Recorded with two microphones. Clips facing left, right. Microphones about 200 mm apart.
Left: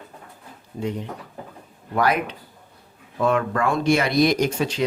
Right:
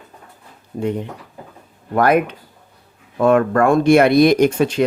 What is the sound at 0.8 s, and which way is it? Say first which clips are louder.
Speech: right 6 dB; 55° right (ahead or behind).